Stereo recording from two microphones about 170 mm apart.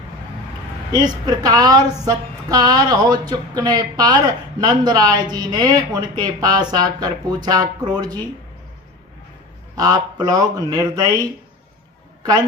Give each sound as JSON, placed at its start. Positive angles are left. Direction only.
{"t": 0.9, "sound": "speech", "side_deg": -25}
{"t": 9.7, "sound": "speech", "side_deg": -25}
{"t": 12.2, "sound": "a man's voice", "side_deg": -25}